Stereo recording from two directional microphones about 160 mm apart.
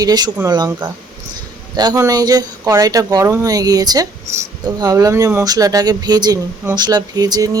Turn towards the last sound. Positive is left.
turn(degrees=-25)  # may be behind; listen again after turning